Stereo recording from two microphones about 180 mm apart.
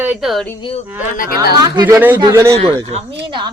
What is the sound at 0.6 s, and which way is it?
Speech, 30° left (ahead or behind).